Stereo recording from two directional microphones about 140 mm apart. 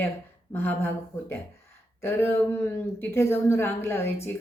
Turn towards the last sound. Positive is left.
turn(degrees=20)  # may be behind; listen again after turning